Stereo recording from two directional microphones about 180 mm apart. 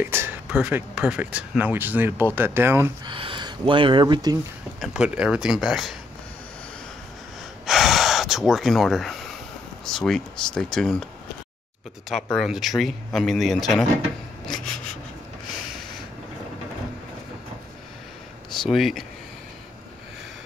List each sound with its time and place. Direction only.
0.0 s speech: 10° right (ahead or behind)
3.1 s speech: 25° right (ahead or behind)
4.7 s speech: centre (ahead or behind)
7.6 s gasp: centre (ahead or behind)
9.8 s speech: 5° left (ahead or behind)
12.1 s speech: centre (ahead or behind)
18.5 s speech: centre (ahead or behind)